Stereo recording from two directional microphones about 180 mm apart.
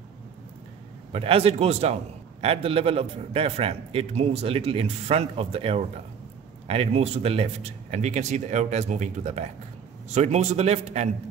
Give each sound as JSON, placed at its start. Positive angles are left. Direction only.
{"t": 1.1, "sound": "a man's voice", "side_deg": -35}